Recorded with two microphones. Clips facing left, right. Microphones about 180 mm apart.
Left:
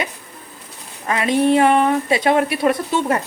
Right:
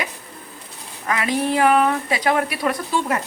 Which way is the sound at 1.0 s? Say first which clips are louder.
Left 5 dB; 25° left (ahead or behind).